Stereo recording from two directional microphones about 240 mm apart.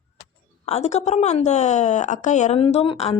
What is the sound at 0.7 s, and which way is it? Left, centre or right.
Speech, left.